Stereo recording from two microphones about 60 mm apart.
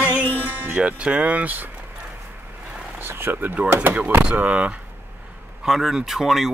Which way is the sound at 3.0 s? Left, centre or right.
Right.